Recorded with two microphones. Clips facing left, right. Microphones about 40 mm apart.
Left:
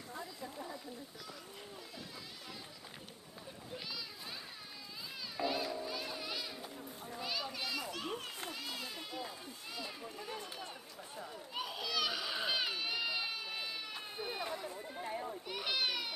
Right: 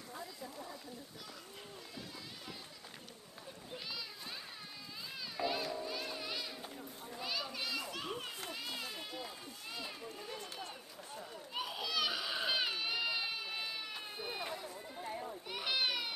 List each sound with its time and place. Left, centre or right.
0.1 s a sound: left
3.7 s children playing: centre
5.4 s children playing: centre
10.2 s run: centre
11.3 s baby cry: centre
14.7 s chatter: left
15.4 s children playing: centre